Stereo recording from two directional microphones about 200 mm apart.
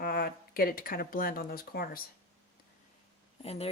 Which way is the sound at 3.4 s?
30° left (ahead or behind).